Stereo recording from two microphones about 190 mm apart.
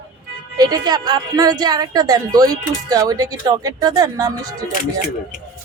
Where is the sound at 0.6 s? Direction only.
20° right (ahead or behind).